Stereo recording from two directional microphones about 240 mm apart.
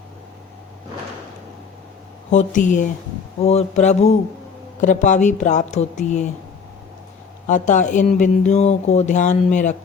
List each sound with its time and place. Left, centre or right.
2.3 s speech: left
7.4 s speech: left